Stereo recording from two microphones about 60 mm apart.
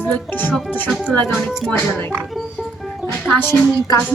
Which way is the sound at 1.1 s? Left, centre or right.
Centre.